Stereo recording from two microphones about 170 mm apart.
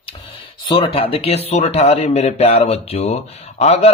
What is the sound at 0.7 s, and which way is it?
A man's voice, 30° left (ahead or behind).